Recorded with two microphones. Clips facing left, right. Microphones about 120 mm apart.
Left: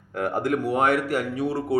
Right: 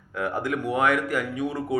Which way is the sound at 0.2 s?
40° left (ahead or behind).